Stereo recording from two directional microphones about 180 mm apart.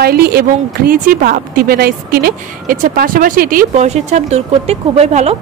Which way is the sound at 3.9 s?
40° right (ahead or behind).